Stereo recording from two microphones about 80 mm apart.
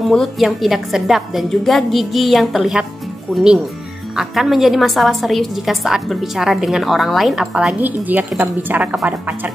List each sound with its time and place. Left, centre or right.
0.1 s a woman's voice: centre
7.8 s a woman's voice: right